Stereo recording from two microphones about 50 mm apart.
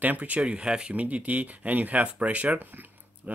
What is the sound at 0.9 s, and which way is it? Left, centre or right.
Speech, right.